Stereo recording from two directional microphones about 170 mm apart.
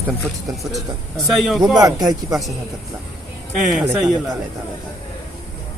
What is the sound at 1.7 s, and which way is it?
Speech, 20° right (ahead or behind).